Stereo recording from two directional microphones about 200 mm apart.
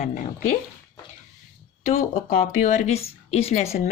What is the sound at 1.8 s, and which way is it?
Speech, 35° left (ahead or behind).